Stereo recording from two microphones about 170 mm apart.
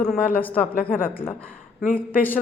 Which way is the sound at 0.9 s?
55° left (ahead or behind).